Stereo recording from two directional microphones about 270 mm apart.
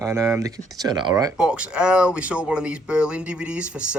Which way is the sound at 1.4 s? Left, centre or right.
Centre.